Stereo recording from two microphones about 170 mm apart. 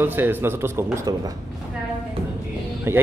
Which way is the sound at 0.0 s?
10° right (ahead or behind).